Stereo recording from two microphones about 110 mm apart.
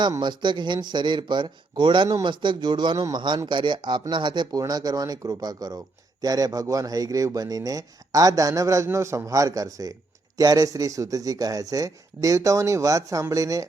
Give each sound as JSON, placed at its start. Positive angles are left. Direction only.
{"t": 0.2, "sound": "a man's voice", "side_deg": -45}